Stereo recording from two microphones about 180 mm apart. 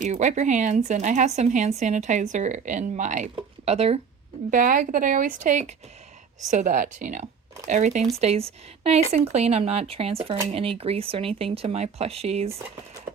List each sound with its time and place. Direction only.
0.0 s speech: 40° right (ahead or behind)
4.5 s a woman's voice: 50° right (ahead or behind)